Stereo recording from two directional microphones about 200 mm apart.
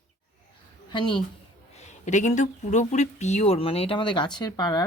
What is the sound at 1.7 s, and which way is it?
Speech, 35° left (ahead or behind).